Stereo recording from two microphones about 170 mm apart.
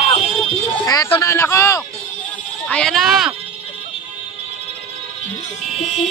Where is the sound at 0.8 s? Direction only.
20° left (ahead or behind).